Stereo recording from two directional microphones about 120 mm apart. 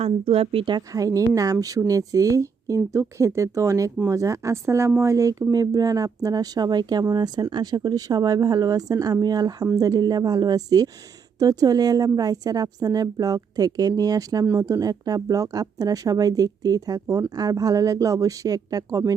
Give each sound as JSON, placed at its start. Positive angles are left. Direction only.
{"t": 0.0, "sound": "a woman's voice", "side_deg": -50}